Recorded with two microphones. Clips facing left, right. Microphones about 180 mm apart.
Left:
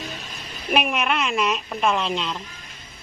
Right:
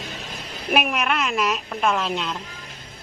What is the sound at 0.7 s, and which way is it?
Speech, 5° right (ahead or behind).